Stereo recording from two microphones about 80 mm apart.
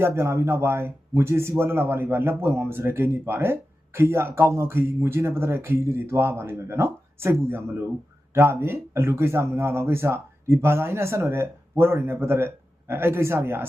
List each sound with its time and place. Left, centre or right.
0.0 s a man's voice: right